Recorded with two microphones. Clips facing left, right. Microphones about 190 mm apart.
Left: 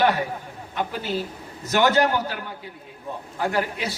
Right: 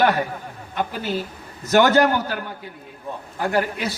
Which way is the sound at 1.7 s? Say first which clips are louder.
Right 4 dB; 45° right (ahead or behind).